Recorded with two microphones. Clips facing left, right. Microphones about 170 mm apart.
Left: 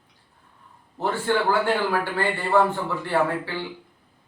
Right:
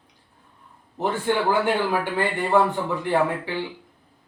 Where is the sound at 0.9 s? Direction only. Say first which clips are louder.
Even; 15° right (ahead or behind).